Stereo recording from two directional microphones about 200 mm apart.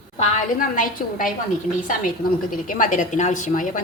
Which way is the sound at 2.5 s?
40° left (ahead or behind).